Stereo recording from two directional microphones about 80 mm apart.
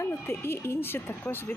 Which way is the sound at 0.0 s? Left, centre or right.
Left.